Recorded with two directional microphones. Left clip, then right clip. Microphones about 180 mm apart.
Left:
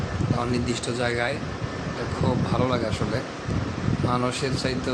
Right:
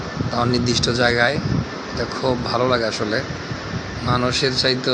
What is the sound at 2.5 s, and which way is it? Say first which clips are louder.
Speech: right 6 dB; 15° right (ahead or behind).